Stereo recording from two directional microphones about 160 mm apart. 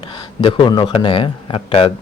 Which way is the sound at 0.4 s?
30° left (ahead or behind).